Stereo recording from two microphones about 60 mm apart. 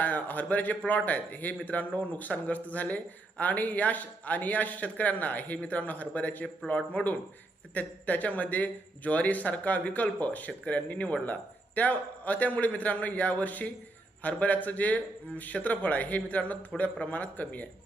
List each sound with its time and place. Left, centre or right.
0.0 s speech: left